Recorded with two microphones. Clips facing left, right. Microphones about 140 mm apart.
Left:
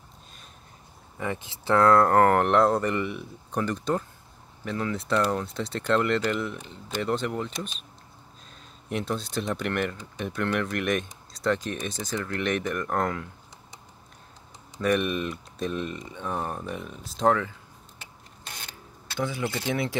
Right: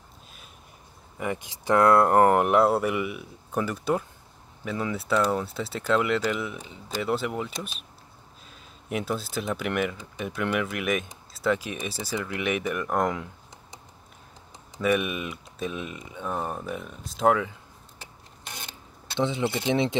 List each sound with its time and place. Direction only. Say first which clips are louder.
1.2 s speech: right 1 dB; 15° right (ahead or behind)
8.8 s speech: even; 5° right (ahead or behind)
14.8 s speech: even; 5° right (ahead or behind)
19.1 s speech: right 3 dB; 25° right (ahead or behind)